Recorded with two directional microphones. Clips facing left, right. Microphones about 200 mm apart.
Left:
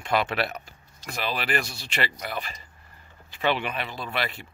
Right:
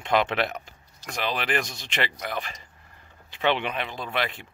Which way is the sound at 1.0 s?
10° left (ahead or behind).